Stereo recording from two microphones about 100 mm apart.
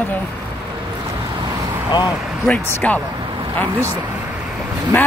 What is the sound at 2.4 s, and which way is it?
Speech, 15° left (ahead or behind).